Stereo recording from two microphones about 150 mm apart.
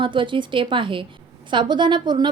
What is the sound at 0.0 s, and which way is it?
A woman's voice, 35° right (ahead or behind).